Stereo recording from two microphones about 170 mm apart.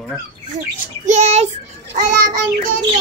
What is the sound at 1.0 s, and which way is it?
A child's voice, 40° right (ahead or behind).